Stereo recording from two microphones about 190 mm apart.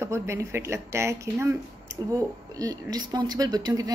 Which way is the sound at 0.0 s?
15° right (ahead or behind).